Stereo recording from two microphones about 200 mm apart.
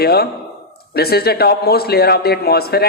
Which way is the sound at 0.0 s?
50° left (ahead or behind).